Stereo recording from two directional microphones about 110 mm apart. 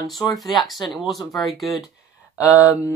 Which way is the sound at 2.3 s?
10° right (ahead or behind).